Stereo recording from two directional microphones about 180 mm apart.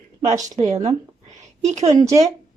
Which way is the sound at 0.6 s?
40° right (ahead or behind).